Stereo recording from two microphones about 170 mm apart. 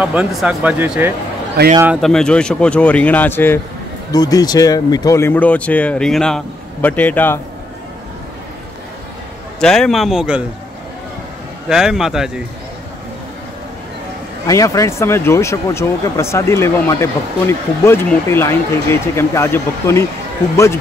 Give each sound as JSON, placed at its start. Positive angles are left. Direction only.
{"t": 0.0, "sound": "a man's voice", "side_deg": -5}
{"t": 2.0, "sound": "speech", "side_deg": 0}
{"t": 9.6, "sound": "a man's voice", "side_deg": 0}
{"t": 11.7, "sound": "a man's voice", "side_deg": -5}
{"t": 14.4, "sound": "speech", "side_deg": 20}